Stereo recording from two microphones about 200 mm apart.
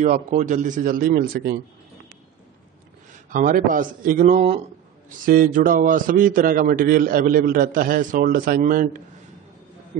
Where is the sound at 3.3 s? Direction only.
45° right (ahead or behind).